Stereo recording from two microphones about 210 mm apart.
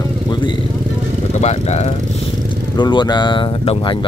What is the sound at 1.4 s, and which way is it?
Speech, 30° left (ahead or behind).